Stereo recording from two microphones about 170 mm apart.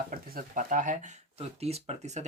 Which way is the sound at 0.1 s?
55° right (ahead or behind).